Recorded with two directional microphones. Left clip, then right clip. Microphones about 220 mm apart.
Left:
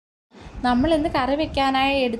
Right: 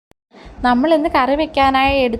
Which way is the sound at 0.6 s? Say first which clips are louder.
Right 6 dB; 15° right (ahead or behind).